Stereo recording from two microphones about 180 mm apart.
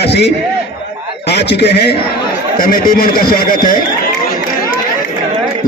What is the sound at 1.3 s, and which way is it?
Speech, 70° left (ahead or behind).